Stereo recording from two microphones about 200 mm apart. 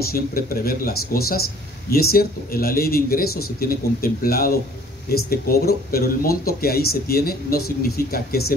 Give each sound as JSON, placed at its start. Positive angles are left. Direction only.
{"t": 0.1, "sound": "speech", "side_deg": 50}